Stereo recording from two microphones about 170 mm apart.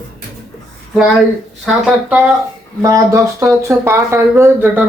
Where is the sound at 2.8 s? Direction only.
20° right (ahead or behind).